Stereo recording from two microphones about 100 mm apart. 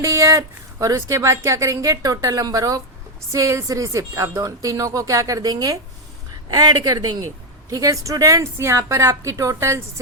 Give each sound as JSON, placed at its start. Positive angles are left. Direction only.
{"t": 0.0, "sound": "a woman's voice", "side_deg": -35}